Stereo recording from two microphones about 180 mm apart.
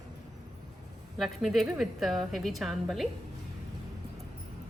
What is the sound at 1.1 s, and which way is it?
A woman's voice, centre (ahead or behind).